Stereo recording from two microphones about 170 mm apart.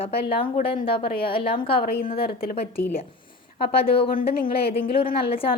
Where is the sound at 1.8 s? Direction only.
60° left (ahead or behind).